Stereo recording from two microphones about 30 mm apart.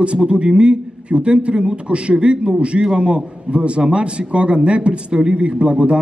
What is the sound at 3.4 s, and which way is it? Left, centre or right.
A man's voice, right.